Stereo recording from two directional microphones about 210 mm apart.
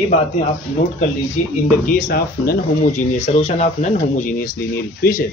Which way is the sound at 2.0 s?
45° left (ahead or behind).